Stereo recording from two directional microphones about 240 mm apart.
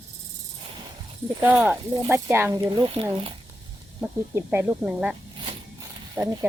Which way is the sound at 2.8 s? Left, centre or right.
Right.